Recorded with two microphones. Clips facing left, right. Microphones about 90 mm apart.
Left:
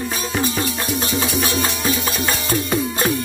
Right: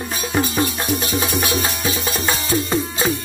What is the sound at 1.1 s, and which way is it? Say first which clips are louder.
Music: even; 45° right (ahead or behind).